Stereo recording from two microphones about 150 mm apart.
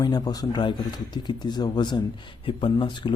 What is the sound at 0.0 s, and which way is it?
Speech, 30° left (ahead or behind).